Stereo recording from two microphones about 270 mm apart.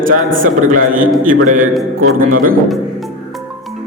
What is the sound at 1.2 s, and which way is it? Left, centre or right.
Music, right.